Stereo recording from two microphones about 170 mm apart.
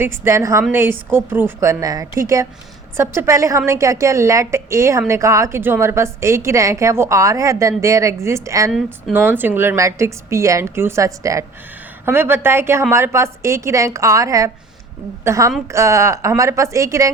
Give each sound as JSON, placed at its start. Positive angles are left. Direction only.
{"t": 0.0, "sound": "a woman's voice", "side_deg": -15}